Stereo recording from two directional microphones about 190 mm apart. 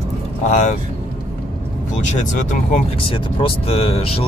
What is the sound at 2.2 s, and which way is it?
Speech, 40° left (ahead or behind).